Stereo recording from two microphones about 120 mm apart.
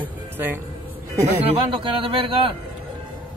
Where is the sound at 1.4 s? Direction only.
45° right (ahead or behind).